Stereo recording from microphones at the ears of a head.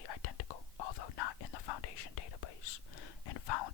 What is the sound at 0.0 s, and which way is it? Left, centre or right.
Whispering, left.